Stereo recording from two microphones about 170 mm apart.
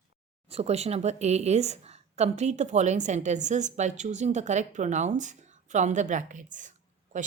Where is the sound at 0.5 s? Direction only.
40° right (ahead or behind).